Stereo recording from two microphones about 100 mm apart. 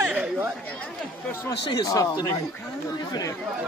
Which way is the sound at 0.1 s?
10° right (ahead or behind).